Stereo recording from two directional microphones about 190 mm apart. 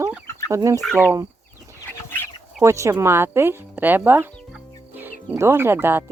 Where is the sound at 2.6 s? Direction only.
15° right (ahead or behind).